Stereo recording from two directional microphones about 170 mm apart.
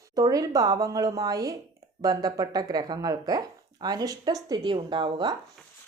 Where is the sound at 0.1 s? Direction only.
20° right (ahead or behind).